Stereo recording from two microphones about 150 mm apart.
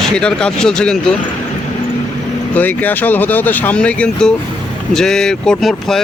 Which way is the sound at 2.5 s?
10° left (ahead or behind).